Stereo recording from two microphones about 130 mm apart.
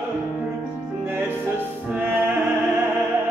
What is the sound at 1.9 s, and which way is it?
Music, 15° right (ahead or behind).